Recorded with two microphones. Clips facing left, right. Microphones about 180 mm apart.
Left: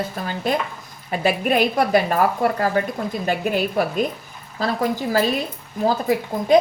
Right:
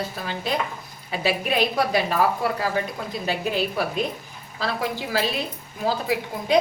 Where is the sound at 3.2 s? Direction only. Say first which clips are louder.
Left 3 dB; 50° left (ahead or behind).